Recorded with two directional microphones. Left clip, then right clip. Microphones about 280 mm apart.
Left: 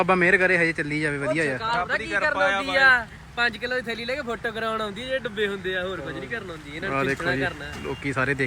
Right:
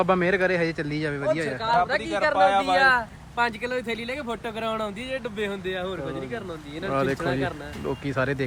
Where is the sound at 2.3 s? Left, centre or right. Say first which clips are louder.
Right 5 dB; centre.